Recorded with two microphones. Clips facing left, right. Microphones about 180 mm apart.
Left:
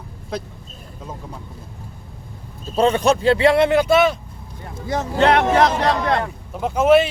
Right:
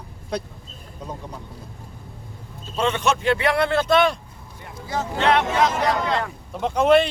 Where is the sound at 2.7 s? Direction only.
35° left (ahead or behind); by 4.1 s 5° left (ahead or behind).